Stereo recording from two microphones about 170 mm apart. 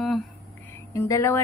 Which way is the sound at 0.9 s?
15° left (ahead or behind).